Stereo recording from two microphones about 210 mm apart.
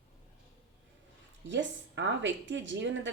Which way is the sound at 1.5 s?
60° right (ahead or behind).